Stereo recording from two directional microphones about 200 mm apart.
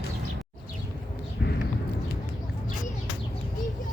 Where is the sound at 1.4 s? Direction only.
55° left (ahead or behind).